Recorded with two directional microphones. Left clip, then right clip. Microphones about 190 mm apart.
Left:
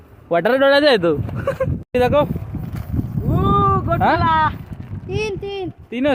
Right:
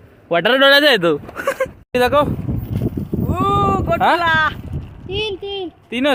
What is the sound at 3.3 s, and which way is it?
Boat, 50° left (ahead or behind).